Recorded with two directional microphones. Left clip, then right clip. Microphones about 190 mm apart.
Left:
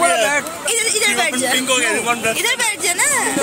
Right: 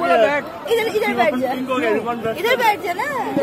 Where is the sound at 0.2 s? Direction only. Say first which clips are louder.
Even; 30° left (ahead or behind).